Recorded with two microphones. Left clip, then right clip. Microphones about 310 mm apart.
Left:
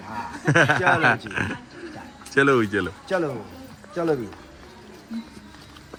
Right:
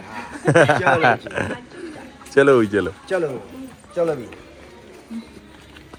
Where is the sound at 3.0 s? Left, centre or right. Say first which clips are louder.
Right 3 dB; left.